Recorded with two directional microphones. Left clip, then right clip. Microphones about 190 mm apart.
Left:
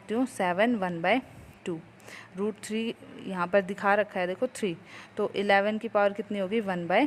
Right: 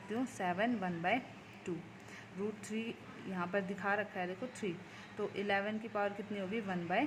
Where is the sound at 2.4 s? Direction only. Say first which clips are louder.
Left 10 dB; 45° left (ahead or behind).